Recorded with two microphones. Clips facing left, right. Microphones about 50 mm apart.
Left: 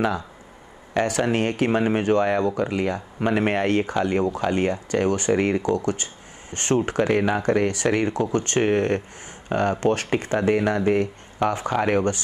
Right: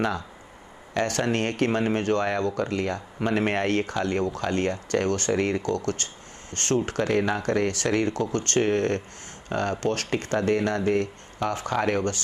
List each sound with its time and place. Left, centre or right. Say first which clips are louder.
0.9 s speech: left 3 dB; centre